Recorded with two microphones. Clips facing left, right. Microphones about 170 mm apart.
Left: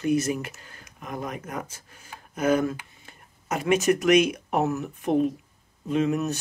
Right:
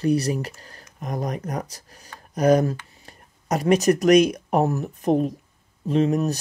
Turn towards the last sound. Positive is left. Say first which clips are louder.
# right 4 dB
turn(degrees=-35)  # may be behind; listen again after turning